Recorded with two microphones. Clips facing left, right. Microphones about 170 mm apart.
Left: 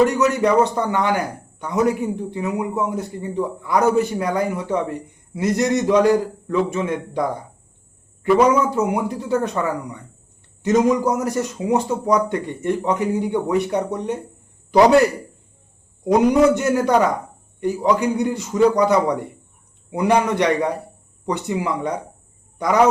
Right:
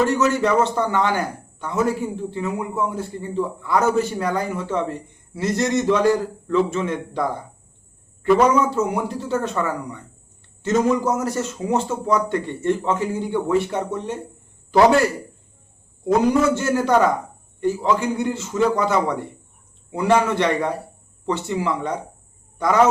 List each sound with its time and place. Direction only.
0.2 s a man's voice: 15° left (ahead or behind)
8.4 s a man's voice: 10° left (ahead or behind)
16.0 s a man's voice: 15° left (ahead or behind)